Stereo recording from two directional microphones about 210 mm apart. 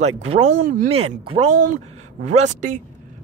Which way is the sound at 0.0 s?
30° right (ahead or behind).